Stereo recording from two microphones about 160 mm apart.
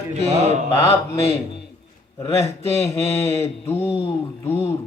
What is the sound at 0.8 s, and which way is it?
A man's voice, 20° left (ahead or behind).